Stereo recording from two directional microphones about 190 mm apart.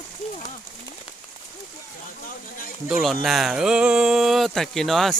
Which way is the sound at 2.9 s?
Centre (ahead or behind).